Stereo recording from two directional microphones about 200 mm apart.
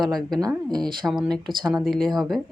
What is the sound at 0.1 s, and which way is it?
Speech, centre (ahead or behind).